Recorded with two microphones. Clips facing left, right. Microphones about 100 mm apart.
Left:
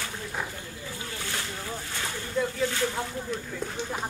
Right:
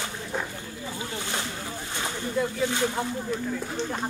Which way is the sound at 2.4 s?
Centre (ahead or behind).